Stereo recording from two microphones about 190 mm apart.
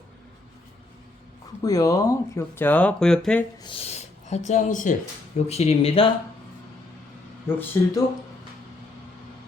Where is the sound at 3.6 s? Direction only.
30° left (ahead or behind).